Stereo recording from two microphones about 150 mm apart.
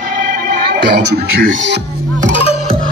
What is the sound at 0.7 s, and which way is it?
Speech, 90° right.